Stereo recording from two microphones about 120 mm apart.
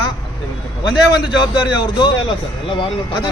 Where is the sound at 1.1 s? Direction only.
40° left (ahead or behind).